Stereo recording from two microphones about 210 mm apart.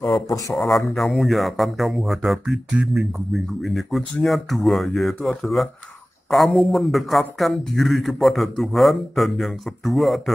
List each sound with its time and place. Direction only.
0.6 s speech: centre (ahead or behind)